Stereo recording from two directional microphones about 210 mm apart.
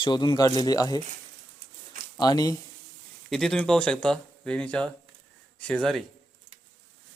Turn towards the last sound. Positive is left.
turn(degrees=0)  # may be behind; listen again after turning